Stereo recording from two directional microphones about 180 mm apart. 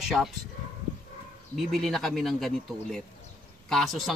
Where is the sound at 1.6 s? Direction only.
Centre (ahead or behind).